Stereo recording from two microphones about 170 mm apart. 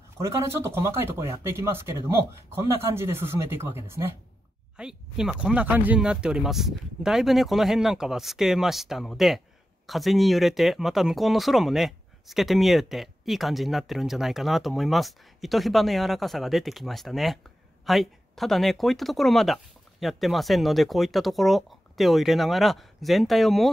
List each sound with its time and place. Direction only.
0.2 s speech: 15° right (ahead or behind)
4.7 s speech: 5° right (ahead or behind)